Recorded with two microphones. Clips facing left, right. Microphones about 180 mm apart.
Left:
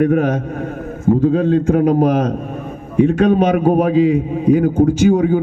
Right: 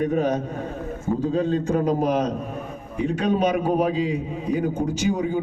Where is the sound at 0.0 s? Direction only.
90° left.